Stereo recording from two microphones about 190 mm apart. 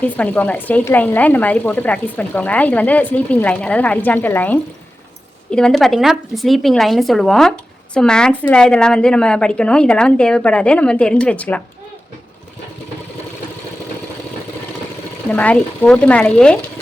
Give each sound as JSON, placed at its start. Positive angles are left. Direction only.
{"t": 0.2, "sound": "a woman's voice", "side_deg": 5}
{"t": 15.3, "sound": "speech", "side_deg": 5}